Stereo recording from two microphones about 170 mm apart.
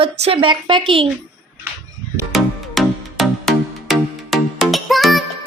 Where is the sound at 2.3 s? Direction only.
Centre (ahead or behind).